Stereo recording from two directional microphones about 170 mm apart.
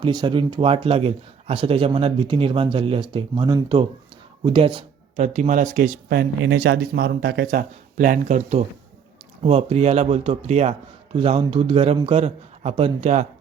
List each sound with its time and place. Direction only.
0.0 s speech: 25° right (ahead or behind)